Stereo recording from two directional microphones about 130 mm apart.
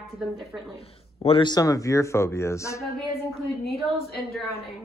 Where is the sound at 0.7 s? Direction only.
50° left (ahead or behind).